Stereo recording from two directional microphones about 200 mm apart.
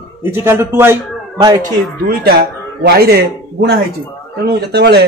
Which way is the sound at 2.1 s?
50° right (ahead or behind).